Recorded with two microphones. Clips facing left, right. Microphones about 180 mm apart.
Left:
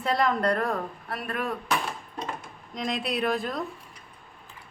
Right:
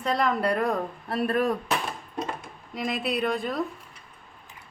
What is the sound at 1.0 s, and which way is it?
Speech, 30° right (ahead or behind).